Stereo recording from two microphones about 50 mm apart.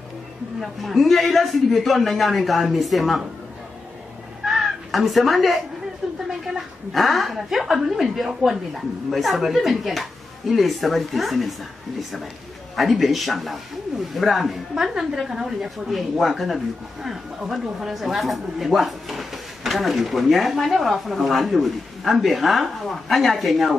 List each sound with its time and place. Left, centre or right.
0.6 s speech: centre
4.5 s cat: centre
6.4 s speech: centre
12.7 s speech: centre